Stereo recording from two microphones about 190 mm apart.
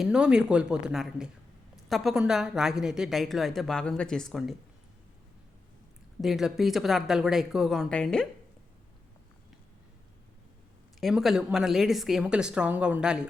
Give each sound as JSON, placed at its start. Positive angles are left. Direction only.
{"t": 0.0, "sound": "a woman's voice", "side_deg": -5}
{"t": 6.2, "sound": "a woman's voice", "side_deg": 0}
{"t": 11.0, "sound": "a woman's voice", "side_deg": 0}